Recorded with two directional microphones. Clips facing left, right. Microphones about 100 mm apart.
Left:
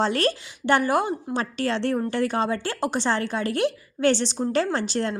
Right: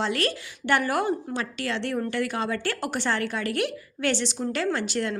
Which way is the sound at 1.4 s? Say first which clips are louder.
Left 4 dB; 35° left (ahead or behind).